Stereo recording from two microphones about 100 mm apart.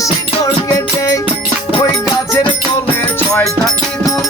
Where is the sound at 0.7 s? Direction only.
35° left (ahead or behind).